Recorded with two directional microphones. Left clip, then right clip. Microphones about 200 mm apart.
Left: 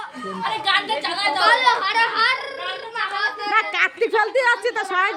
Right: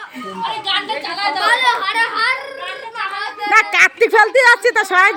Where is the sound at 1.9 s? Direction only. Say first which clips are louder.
Right 2 dB; 15° right (ahead or behind).